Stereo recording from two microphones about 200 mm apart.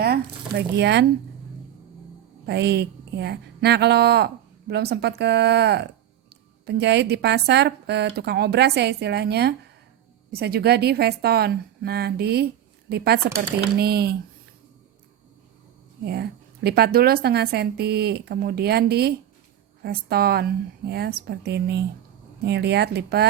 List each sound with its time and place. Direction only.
0.0 s speech: 55° right (ahead or behind)
2.5 s a woman's voice: 55° right (ahead or behind)
16.0 s a woman's voice: 55° right (ahead or behind)